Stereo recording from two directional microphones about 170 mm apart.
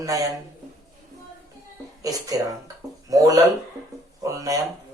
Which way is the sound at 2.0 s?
20° right (ahead or behind).